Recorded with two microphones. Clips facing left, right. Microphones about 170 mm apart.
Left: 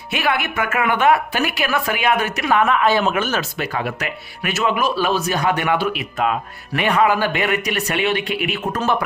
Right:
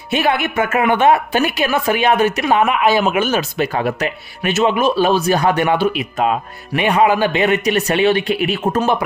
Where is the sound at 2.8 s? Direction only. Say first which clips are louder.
Right 3 dB; 10° right (ahead or behind).